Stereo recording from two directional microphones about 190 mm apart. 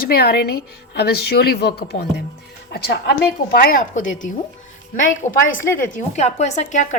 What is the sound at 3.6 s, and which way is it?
Speech, 45° left (ahead or behind).